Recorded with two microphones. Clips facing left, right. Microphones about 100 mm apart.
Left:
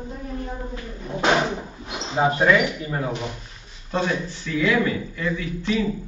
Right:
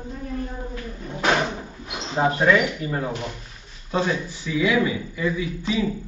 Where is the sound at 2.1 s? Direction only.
5° left (ahead or behind); by 5.7 s 10° right (ahead or behind).